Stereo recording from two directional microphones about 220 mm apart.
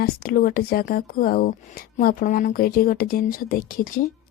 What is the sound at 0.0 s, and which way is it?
Speech, 40° left (ahead or behind).